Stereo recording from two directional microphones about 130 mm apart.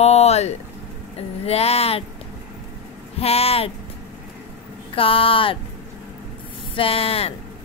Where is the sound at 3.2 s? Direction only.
50° left (ahead or behind).